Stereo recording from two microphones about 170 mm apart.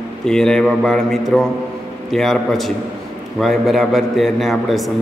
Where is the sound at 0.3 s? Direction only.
5° left (ahead or behind).